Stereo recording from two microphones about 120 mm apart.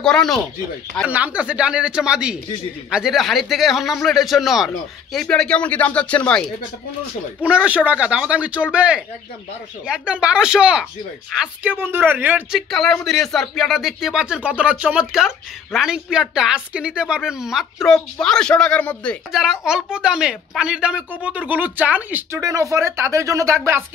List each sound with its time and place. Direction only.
0.0 s speech: 5° left (ahead or behind)
1.0 s a woman's voice: 10° right (ahead or behind); by 6.4 s 10° left (ahead or behind)
7.4 s a woman's voice: 10° right (ahead or behind)
11.7 s a woman's voice: 15° right (ahead or behind)
12.5 s speech: centre (ahead or behind)
19.3 s a woman's voice: 5° right (ahead or behind)
22.4 s speech: 30° right (ahead or behind)